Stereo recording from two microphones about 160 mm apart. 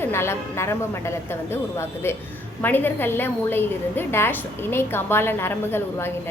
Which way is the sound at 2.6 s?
10° left (ahead or behind).